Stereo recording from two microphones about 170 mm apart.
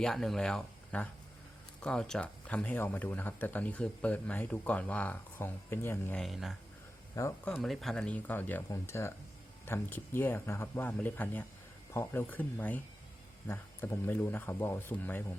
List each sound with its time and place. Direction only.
0.0 s speech: centre (ahead or behind)
6.2 s speech: centre (ahead or behind)
7.2 s speech: 20° left (ahead or behind)
7.5 s speech: centre (ahead or behind)